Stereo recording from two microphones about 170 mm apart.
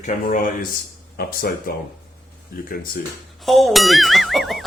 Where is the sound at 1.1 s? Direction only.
60° left (ahead or behind).